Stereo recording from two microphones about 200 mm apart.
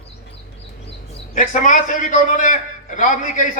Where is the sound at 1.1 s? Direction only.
40° left (ahead or behind).